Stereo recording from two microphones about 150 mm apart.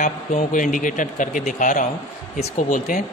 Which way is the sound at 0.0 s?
60° left (ahead or behind).